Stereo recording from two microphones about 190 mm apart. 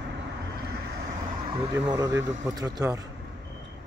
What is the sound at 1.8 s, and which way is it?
Speech, 20° right (ahead or behind).